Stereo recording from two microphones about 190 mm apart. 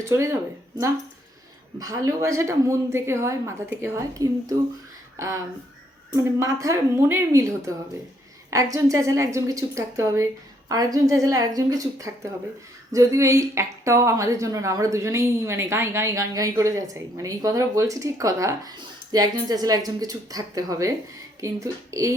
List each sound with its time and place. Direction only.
0.0 s speech: 15° right (ahead or behind)
1.8 s speech: 20° right (ahead or behind)
6.4 s speech: 15° right (ahead or behind)
8.7 s a woman's voice: 15° right (ahead or behind)